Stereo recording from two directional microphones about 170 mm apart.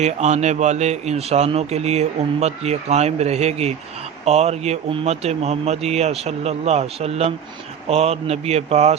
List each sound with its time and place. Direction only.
0.0 s speech: 40° right (ahead or behind)